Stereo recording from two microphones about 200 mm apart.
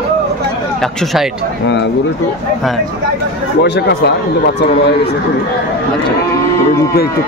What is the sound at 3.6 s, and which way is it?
Speech, 55° left (ahead or behind).